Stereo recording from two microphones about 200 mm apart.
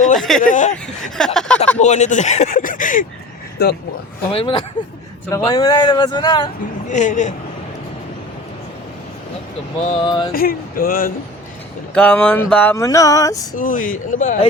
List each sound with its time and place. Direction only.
0.2 s speech: centre (ahead or behind)
0.4 s speech: 40° left (ahead or behind)
1.1 s a sound: 5° left (ahead or behind)
1.8 s speech: 35° left (ahead or behind)
3.6 s speech: 55° left (ahead or behind)
4.3 s speech: 25° left (ahead or behind)
6.8 s speech: 35° left (ahead or behind)
10.0 s speech: 20° left (ahead or behind)
10.3 s speech: 45° left (ahead or behind)
11.9 s speech: 5° left (ahead or behind)
13.6 s speech: 40° left (ahead or behind)